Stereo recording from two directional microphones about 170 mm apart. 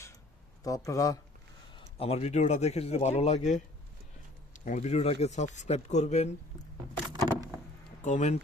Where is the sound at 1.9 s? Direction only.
35° left (ahead or behind).